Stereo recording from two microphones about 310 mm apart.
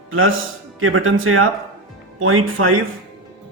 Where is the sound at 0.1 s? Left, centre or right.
Right.